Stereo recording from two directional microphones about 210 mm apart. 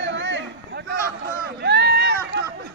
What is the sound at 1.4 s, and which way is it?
Run, 55° right (ahead or behind).